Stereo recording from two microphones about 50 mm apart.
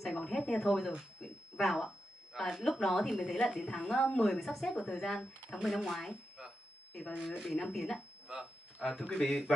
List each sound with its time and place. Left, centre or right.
0.0 s speech: centre
3.2 s a woman's voice: left
4.4 s speech: centre
6.3 s a sound: centre
7.2 s speech: centre
8.8 s speech: centre
9.1 s speech: centre